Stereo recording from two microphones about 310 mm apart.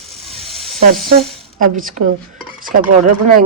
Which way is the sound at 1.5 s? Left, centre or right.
Right.